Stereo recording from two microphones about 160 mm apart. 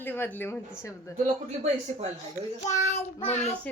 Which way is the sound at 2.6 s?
45° left (ahead or behind).